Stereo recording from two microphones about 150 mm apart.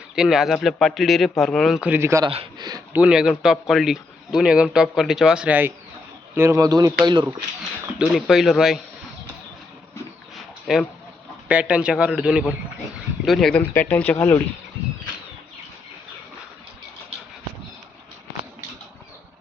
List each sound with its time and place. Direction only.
0.2 s a man's voice: 5° right (ahead or behind)
2.2 s speech: 35° right (ahead or behind)
2.9 s a man's voice: 5° right (ahead or behind); by 7.3 s 30° right (ahead or behind)
7.9 s a man's voice: centre (ahead or behind)
10.7 s a man's voice: centre (ahead or behind)
13.6 s speech: 10° left (ahead or behind)